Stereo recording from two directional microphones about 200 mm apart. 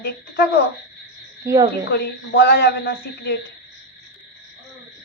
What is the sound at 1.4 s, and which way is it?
Speech, 15° right (ahead or behind).